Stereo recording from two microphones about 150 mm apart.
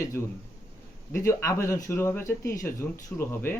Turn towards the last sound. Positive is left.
turn(degrees=15)  # may be behind; listen again after turning